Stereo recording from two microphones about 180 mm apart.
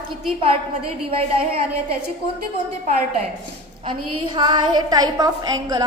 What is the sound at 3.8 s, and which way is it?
A woman's voice, 25° right (ahead or behind).